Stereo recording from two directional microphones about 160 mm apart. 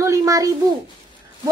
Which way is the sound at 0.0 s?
20° right (ahead or behind).